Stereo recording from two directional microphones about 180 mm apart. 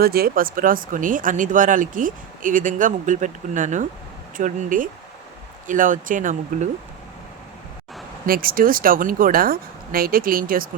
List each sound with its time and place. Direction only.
0.0 s speech: 60° right (ahead or behind)
8.3 s speech: 55° right (ahead or behind)